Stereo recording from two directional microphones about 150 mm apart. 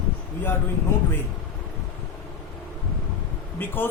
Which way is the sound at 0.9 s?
15° left (ahead or behind).